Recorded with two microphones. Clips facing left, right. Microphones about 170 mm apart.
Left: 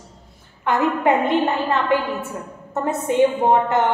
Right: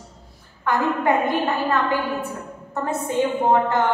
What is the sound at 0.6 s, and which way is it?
A woman's voice, 20° left (ahead or behind).